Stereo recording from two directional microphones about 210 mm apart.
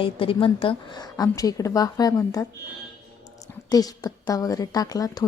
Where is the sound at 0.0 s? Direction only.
25° left (ahead or behind).